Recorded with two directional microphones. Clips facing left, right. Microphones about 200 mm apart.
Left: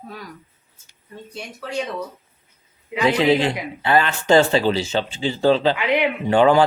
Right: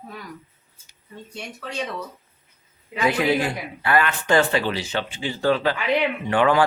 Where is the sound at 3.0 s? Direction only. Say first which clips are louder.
Left 4 dB; 25° left (ahead or behind).